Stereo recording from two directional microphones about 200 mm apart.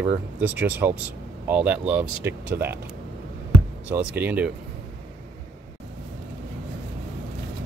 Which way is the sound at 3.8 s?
10° right (ahead or behind).